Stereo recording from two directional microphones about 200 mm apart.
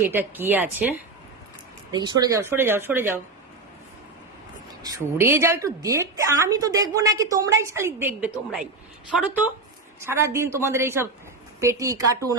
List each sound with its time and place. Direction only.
0.1 s a woman's voice: 10° right (ahead or behind)
1.9 s a woman's voice: 20° right (ahead or behind)
4.8 s a woman's voice: 15° right (ahead or behind)